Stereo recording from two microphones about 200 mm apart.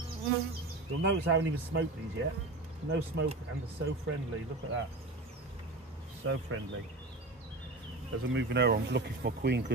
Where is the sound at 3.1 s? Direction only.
60° right (ahead or behind).